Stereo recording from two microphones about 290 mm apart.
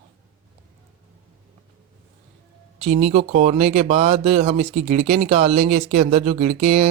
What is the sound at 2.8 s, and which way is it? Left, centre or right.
Speech, right.